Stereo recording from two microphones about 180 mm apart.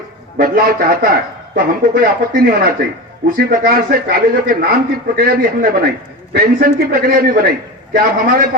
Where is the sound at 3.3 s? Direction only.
50° right (ahead or behind).